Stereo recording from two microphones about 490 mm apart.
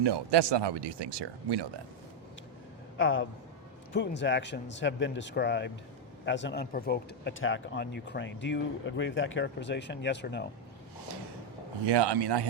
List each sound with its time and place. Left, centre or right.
0.0 s speech: right
3.0 s speech: left
11.9 s a man's voice: right